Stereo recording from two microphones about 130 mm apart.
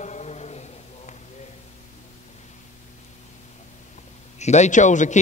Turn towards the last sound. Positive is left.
turn(degrees=70)  # may be behind; listen again after turning